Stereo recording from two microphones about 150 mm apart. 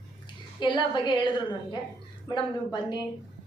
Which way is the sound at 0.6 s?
30° left (ahead or behind).